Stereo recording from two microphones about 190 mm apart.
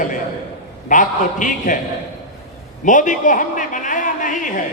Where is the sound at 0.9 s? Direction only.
40° left (ahead or behind).